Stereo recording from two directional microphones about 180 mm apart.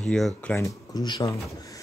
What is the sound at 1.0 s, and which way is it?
Speech, 20° left (ahead or behind).